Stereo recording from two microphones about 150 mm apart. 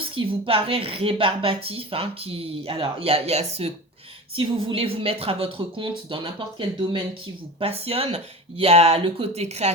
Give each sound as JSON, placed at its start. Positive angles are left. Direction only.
{"t": 0.0, "sound": "a woman's voice", "side_deg": -35}